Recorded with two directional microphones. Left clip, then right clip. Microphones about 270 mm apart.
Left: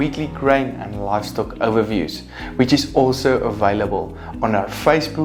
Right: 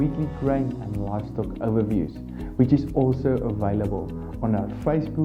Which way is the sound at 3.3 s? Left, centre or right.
Centre.